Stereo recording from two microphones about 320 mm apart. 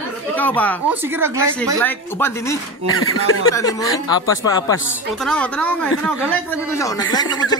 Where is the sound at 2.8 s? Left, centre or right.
Left.